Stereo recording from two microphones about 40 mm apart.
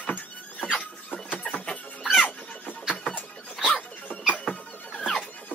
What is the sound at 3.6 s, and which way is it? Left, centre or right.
Dog, centre.